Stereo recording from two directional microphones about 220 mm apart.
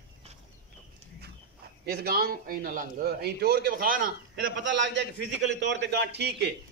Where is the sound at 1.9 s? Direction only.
45° right (ahead or behind).